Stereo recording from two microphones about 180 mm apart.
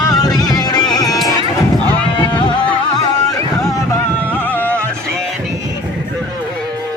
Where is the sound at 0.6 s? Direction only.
20° left (ahead or behind).